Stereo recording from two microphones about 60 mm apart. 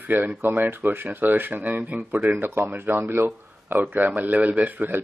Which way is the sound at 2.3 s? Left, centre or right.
Right.